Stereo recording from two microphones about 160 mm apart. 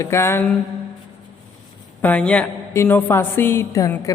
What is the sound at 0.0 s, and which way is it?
Speech, 15° left (ahead or behind).